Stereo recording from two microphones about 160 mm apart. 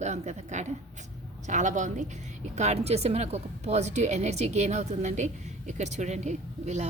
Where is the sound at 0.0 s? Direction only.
45° right (ahead or behind).